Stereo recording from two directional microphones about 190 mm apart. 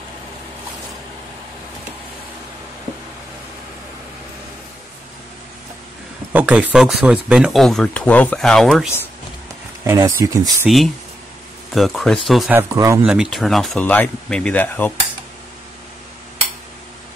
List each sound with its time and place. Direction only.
6.3 s speech: 10° right (ahead or behind)
9.8 s speech: 15° right (ahead or behind)
11.7 s speech: centre (ahead or behind)
12.5 s speech: 15° right (ahead or behind)
13.0 s speech: 5° right (ahead or behind)